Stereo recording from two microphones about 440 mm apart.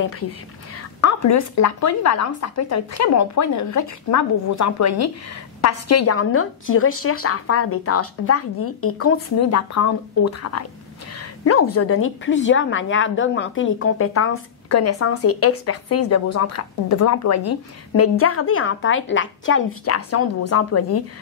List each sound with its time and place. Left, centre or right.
1.0 s a woman's voice: left
11.1 s a sound: left
11.7 s a woman's voice: left